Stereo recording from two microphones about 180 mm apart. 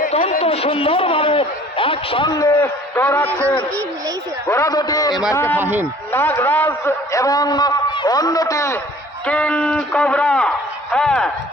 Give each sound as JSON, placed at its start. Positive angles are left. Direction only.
{"t": 0.1, "sound": "a sound", "side_deg": 35}
{"t": 2.6, "sound": "a man's voice", "side_deg": 10}
{"t": 4.4, "sound": "a man's voice", "side_deg": 15}
{"t": 9.2, "sound": "a man's voice", "side_deg": 5}